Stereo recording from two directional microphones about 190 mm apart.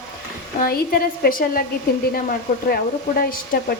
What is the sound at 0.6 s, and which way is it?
Speech, 50° left (ahead or behind).